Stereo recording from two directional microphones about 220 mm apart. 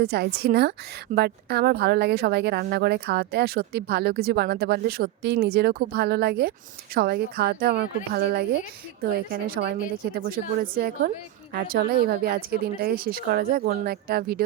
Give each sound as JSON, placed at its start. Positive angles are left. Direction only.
{"t": 0.0, "sound": "a woman's voice", "side_deg": -45}